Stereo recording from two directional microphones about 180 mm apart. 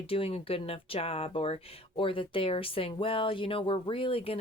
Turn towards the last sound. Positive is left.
turn(degrees=30)  # may be behind; listen again after turning